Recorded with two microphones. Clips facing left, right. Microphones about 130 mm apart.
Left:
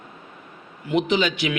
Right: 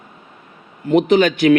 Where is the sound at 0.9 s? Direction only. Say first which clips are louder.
Right 8 dB; 50° right (ahead or behind).